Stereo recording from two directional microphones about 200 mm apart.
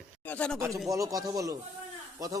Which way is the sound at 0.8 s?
15° right (ahead or behind).